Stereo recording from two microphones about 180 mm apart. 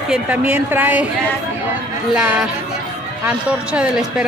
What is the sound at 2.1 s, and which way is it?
Speech, 10° right (ahead or behind).